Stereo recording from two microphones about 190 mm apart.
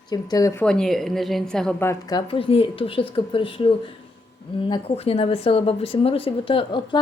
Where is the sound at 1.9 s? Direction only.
20° left (ahead or behind).